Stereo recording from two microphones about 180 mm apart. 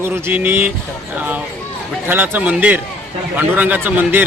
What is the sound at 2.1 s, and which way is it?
A man's voice, 10° right (ahead or behind).